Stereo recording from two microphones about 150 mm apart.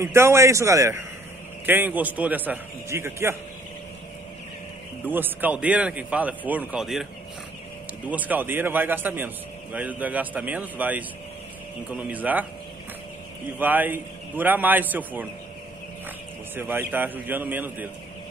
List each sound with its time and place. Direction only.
0.0 s a man's voice: 15° right (ahead or behind)
5.0 s a man's voice: 15° right (ahead or behind)
8.1 s a man's voice: 10° right (ahead or behind)
12.1 s a man's voice: 10° right (ahead or behind)
13.6 s a man's voice: 10° right (ahead or behind)
16.5 s a man's voice: 15° right (ahead or behind)